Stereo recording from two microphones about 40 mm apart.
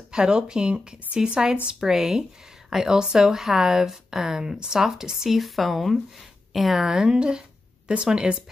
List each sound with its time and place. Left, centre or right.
0.1 s speech: right
5.4 s speech: centre; by 8.4 s right